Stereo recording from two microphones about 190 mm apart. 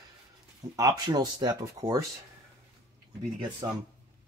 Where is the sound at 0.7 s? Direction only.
20° right (ahead or behind).